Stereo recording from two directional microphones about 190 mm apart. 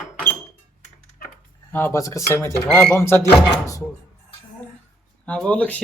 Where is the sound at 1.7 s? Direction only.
10° left (ahead or behind).